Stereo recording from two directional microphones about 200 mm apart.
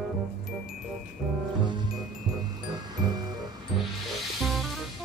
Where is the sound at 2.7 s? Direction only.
20° right (ahead or behind).